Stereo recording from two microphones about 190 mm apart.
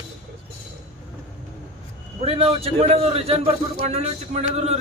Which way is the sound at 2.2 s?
30° right (ahead or behind).